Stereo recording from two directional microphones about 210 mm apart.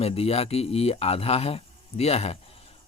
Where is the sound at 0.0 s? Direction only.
30° left (ahead or behind).